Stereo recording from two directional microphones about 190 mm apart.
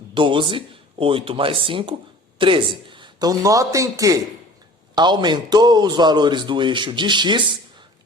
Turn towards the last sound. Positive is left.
turn(degrees=-25)  # may be behind; listen again after turning